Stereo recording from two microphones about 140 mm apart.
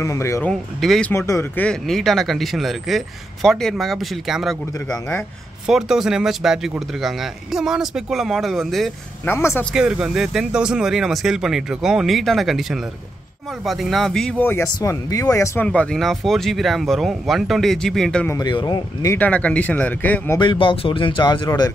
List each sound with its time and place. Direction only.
0.0 s speech: 20° left (ahead or behind)
0.4 s speech: 5° left (ahead or behind)
1.1 s speech: 20° left (ahead or behind)
1.6 s speech: 5° left (ahead or behind)
9.2 s speech: 15° left (ahead or behind)
9.8 s speech: 5° right (ahead or behind); by 14.7 s 10° left (ahead or behind)
14.8 s speech: 25° left (ahead or behind)
15.6 s speech: 10° left (ahead or behind)
18.3 s speech: 30° left (ahead or behind)
19.0 s speech: 10° left (ahead or behind)
20.3 s speech: 35° left (ahead or behind)